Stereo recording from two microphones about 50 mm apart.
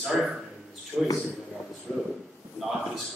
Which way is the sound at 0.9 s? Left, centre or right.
Right.